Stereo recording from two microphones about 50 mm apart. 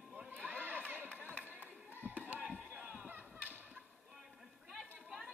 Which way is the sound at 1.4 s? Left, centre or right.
Right.